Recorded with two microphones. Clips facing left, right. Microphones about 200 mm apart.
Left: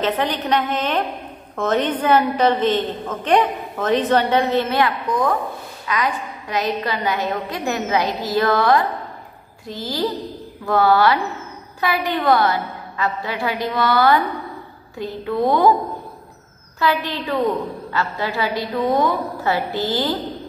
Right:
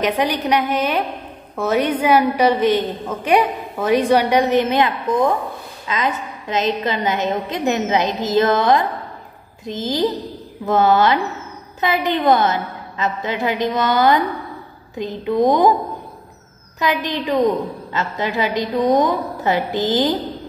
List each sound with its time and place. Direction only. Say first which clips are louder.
0.0 s a woman's voice: right 2 dB; 15° right (ahead or behind)
16.8 s a woman's voice: right 1 dB; 15° right (ahead or behind)